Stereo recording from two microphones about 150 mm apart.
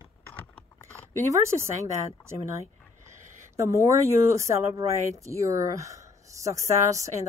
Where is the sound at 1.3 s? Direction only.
20° right (ahead or behind).